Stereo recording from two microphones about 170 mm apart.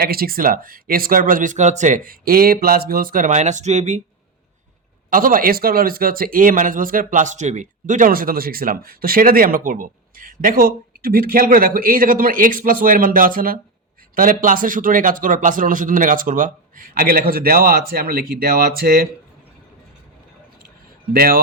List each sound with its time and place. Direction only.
0.0 s speech: 60° right (ahead or behind); by 4.0 s 45° right (ahead or behind)
5.1 s speech: 55° right (ahead or behind)
21.1 s speech: 60° right (ahead or behind)